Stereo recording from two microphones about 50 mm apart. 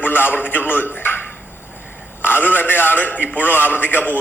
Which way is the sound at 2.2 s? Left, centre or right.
Left.